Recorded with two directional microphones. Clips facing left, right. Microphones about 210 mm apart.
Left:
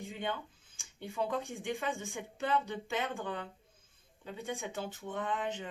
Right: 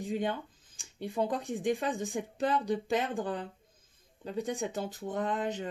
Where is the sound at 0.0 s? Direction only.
40° right (ahead or behind).